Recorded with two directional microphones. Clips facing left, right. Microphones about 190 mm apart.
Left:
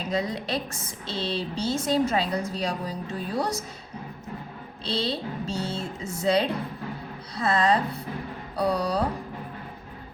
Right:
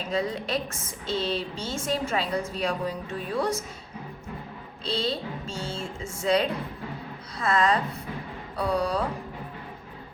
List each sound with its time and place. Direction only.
0.1 s a woman's voice: 40° left (ahead or behind)
4.9 s a woman's voice: 35° left (ahead or behind)